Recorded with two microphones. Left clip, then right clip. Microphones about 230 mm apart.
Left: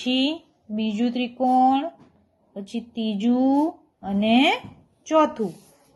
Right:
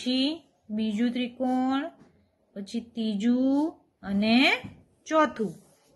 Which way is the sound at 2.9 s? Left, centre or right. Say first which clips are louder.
Left 4 dB; centre.